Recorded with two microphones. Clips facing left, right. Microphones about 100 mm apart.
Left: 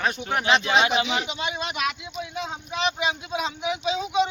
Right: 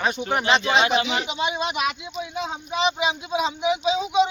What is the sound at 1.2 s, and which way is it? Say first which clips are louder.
Speech: right 4 dB; 15° right (ahead or behind).